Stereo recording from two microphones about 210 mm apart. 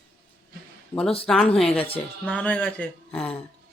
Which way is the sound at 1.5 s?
Centre (ahead or behind).